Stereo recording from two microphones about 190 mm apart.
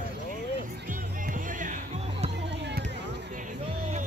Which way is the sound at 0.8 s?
45° right (ahead or behind).